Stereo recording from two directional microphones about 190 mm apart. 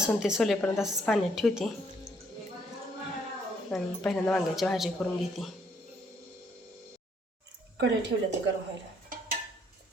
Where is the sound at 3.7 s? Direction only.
5° left (ahead or behind).